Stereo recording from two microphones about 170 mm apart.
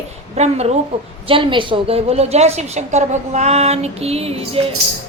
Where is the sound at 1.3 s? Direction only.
30° right (ahead or behind).